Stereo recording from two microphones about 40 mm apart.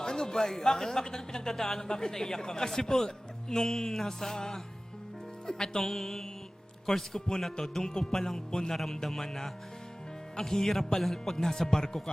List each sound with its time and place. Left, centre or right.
0.0 s a man's voice: centre